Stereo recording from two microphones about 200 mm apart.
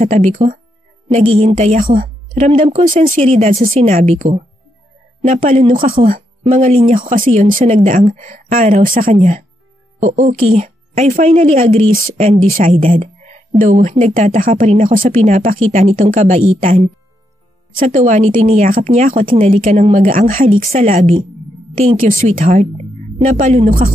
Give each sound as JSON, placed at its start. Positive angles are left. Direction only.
{"t": 0.0, "sound": "speech", "side_deg": -35}
{"t": 12.9, "sound": "a sound", "side_deg": -35}
{"t": 13.5, "sound": "speech", "side_deg": -40}